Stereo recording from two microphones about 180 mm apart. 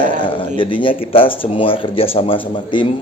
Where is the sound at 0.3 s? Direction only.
30° left (ahead or behind).